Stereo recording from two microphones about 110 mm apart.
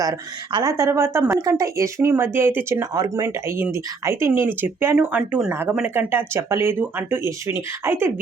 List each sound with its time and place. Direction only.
0.0 s speech: 35° right (ahead or behind)
2.9 s speech: 35° right (ahead or behind)
3.2 s speech: 25° right (ahead or behind)